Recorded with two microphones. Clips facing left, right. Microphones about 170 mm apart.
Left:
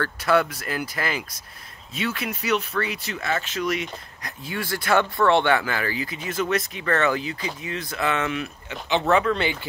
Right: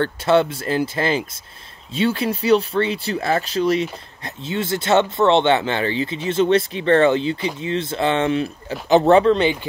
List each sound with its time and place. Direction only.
0.0 s speech: 25° right (ahead or behind)
9.3 s speech: 20° right (ahead or behind)